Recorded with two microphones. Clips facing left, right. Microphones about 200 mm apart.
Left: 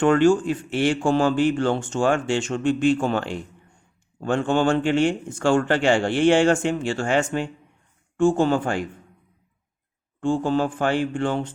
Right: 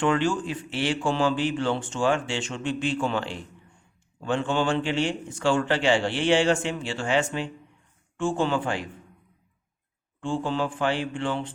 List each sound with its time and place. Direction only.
0.0 s speech: 45° left (ahead or behind)
10.2 s speech: 45° left (ahead or behind)